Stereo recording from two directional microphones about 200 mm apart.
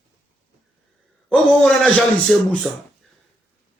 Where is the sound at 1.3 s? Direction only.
5° left (ahead or behind).